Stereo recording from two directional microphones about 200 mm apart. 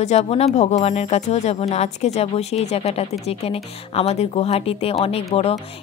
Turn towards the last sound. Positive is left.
turn(degrees=30)  # may be behind; listen again after turning